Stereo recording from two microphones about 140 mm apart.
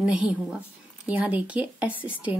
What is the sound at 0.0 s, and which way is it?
A woman's voice, 5° right (ahead or behind).